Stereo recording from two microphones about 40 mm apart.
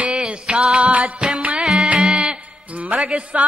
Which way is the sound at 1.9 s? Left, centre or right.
Right.